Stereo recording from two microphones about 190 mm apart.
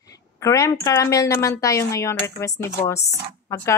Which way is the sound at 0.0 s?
15° left (ahead or behind).